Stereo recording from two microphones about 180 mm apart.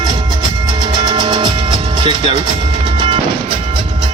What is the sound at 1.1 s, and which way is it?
Music, 25° right (ahead or behind).